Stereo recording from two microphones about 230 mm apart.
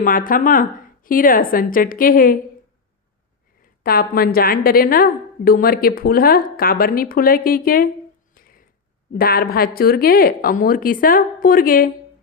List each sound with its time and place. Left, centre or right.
0.0 s a woman's voice: left
3.6 s a woman's voice: left
8.4 s a sound: left
9.1 s a woman's voice: left